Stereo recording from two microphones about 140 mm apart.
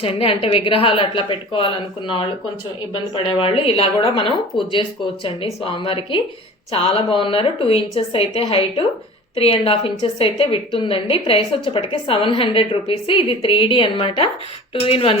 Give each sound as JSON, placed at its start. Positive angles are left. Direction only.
{"t": 0.0, "sound": "a woman's voice", "side_deg": 40}